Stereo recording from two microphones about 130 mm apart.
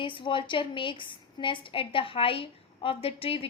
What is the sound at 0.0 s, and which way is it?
A woman's voice, 40° left (ahead or behind).